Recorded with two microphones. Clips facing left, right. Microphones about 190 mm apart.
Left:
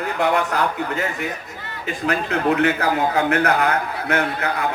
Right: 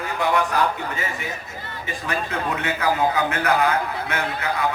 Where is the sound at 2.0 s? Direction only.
70° left (ahead or behind).